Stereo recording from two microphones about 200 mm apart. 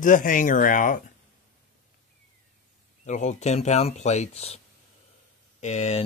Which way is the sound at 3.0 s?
35° left (ahead or behind).